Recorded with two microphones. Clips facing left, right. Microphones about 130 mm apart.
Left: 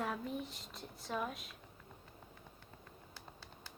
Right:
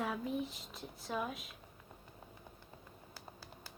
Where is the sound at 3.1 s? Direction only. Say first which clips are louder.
Right 4 dB; 5° right (ahead or behind).